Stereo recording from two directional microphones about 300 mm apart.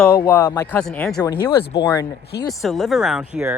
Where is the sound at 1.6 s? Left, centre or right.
Left.